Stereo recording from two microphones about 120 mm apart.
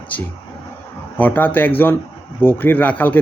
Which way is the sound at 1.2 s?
15° left (ahead or behind).